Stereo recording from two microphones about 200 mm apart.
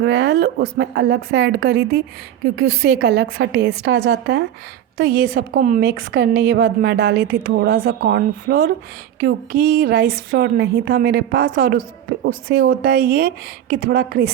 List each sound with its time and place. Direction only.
0.0 s a woman's voice: 55° right (ahead or behind)